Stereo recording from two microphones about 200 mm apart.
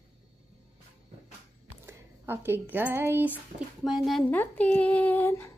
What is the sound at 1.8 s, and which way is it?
Speech, 10° right (ahead or behind).